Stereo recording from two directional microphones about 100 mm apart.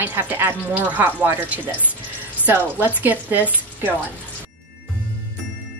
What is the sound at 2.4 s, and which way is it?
Speech, 20° right (ahead or behind).